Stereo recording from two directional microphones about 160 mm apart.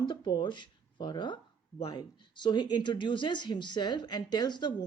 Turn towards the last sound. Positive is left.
turn(degrees=25)  # may be behind; listen again after turning